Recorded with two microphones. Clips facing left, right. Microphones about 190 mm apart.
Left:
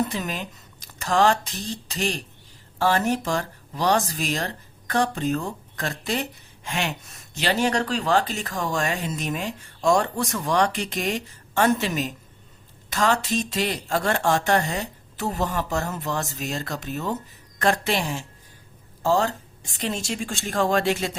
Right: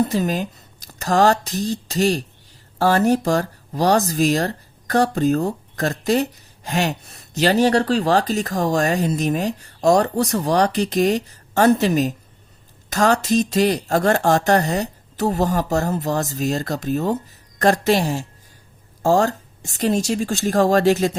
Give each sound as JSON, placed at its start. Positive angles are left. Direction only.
{"t": 0.1, "sound": "speech", "side_deg": -40}